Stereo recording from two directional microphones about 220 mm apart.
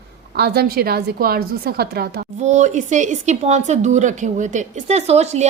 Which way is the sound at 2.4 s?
30° right (ahead or behind).